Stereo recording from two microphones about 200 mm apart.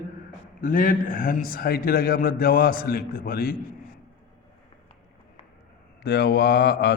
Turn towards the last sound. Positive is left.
turn(degrees=55)  # may be behind; listen again after turning